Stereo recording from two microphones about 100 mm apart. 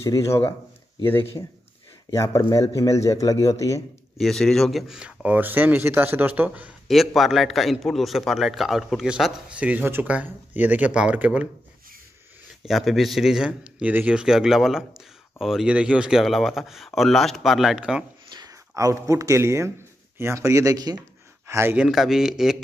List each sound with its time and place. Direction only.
0.0 s speech: 30° left (ahead or behind)
2.1 s speech: 30° left (ahead or behind)
4.2 s a man's voice: 5° left (ahead or behind); by 6.7 s 15° right (ahead or behind)
6.9 s speech: centre (ahead or behind)
12.6 s speech: centre (ahead or behind)
18.3 s speech: 40° right (ahead or behind)
21.5 s speech: 25° right (ahead or behind)
21.7 s speech: 5° right (ahead or behind)